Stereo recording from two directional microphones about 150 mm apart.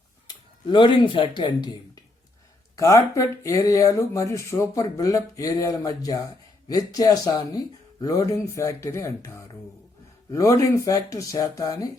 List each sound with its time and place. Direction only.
0.3 s speech: 30° left (ahead or behind)